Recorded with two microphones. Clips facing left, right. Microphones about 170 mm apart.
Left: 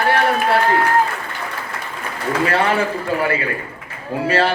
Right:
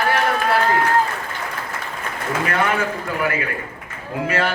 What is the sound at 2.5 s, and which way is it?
A man's voice, 30° left (ahead or behind).